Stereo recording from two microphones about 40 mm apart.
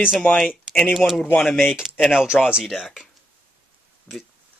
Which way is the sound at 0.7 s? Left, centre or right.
Centre.